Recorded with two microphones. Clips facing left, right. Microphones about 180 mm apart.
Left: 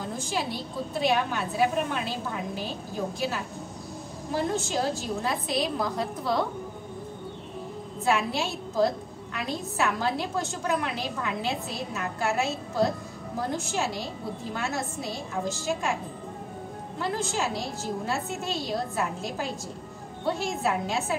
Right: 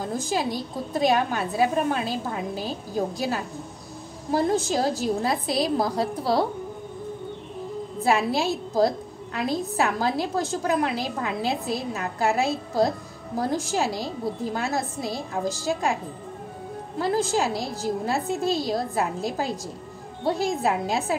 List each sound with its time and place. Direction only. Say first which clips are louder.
0.2 s a woman's voice: right 4 dB; 40° right (ahead or behind)
8.0 s a woman's voice: right 4 dB; 35° right (ahead or behind)
17.0 s a woman's voice: right 6 dB; 35° right (ahead or behind)